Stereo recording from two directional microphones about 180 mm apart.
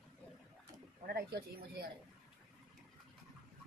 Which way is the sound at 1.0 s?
55° right (ahead or behind).